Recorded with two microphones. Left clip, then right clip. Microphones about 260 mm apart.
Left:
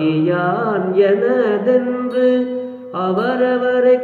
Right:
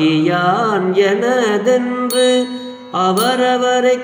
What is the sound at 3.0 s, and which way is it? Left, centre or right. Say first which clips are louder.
Mantra: right 2 dB; right.